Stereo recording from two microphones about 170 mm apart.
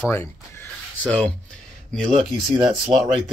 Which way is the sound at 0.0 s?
15° left (ahead or behind).